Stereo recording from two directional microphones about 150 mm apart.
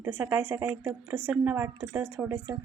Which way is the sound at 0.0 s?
10° right (ahead or behind).